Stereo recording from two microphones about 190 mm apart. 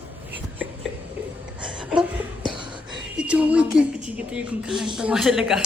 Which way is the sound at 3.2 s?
5° right (ahead or behind).